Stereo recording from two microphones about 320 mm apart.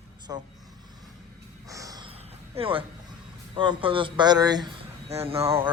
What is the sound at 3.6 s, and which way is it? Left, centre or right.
Speech, centre.